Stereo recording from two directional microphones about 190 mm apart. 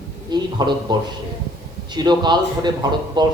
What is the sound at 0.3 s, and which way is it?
Speech, 20° right (ahead or behind).